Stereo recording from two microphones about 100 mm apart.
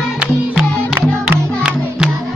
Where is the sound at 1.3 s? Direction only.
10° right (ahead or behind).